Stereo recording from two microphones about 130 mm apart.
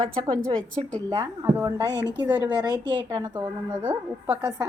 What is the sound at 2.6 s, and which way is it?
Speech, 35° right (ahead or behind).